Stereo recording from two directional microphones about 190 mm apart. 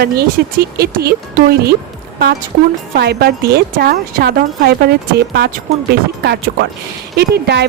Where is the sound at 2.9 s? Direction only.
55° right (ahead or behind).